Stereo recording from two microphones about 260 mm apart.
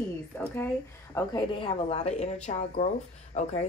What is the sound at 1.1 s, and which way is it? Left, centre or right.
Speech, centre.